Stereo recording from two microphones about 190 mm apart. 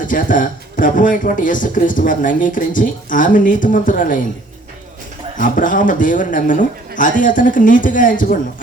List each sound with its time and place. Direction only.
0.0 s speech: 45° left (ahead or behind)
5.4 s speech: 45° left (ahead or behind)